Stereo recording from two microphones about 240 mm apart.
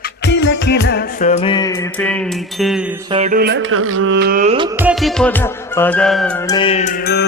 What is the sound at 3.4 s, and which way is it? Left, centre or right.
Speech, right.